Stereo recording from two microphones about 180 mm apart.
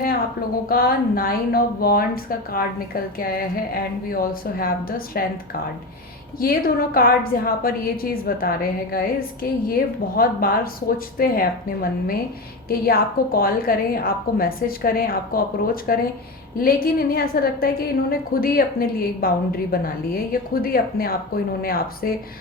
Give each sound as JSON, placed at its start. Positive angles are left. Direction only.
{"t": 0.7, "sound": "a woman's voice", "side_deg": 55}
{"t": 6.4, "sound": "a woman's voice", "side_deg": 55}